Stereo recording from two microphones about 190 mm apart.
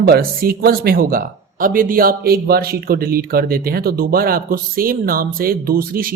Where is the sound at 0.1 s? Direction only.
50° right (ahead or behind).